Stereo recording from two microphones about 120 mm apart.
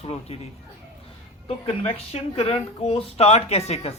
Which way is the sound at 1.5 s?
55° left (ahead or behind).